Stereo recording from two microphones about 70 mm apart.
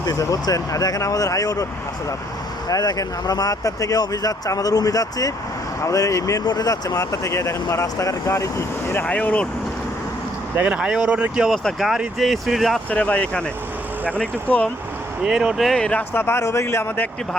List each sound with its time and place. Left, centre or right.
0.0 s speech: left
2.6 s speech: left
6.4 s speech: left
9.0 s speech: centre
10.5 s speech: right
10.8 s speech: centre
11.8 s speech: centre
12.9 s speech: left
15.2 s speech: centre
15.7 s speech: centre
16.1 s speech: left